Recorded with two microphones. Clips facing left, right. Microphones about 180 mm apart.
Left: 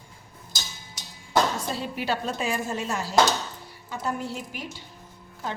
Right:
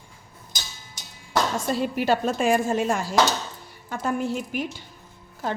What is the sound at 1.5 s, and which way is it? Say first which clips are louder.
Speech: right 6 dB; 50° right (ahead or behind).